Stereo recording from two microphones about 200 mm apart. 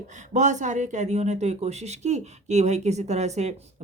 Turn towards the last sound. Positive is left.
turn(degrees=-35)  # may be behind; listen again after turning